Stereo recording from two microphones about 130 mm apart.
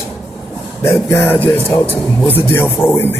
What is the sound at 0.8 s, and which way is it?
A man's voice, 20° left (ahead or behind).